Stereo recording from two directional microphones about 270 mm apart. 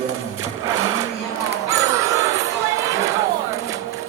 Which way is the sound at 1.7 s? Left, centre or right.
Centre.